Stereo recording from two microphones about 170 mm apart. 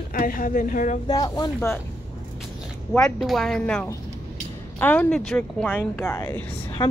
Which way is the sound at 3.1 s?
Centre (ahead or behind).